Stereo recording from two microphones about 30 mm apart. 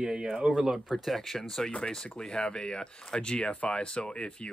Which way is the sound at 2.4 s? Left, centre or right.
Left.